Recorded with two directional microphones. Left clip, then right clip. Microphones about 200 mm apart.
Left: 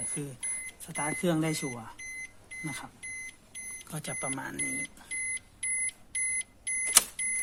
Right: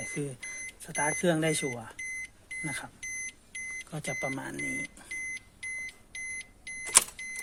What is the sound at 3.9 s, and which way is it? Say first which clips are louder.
Speech: right 2 dB; 5° right (ahead or behind).